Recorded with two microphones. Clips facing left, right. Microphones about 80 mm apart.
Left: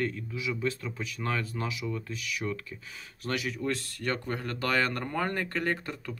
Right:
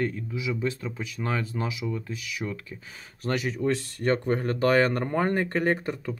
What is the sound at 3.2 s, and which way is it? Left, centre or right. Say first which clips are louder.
Speech: right 5 dB; right.